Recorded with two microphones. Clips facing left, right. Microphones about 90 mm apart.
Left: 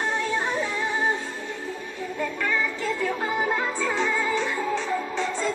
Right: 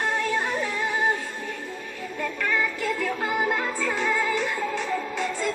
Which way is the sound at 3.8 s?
20° left (ahead or behind).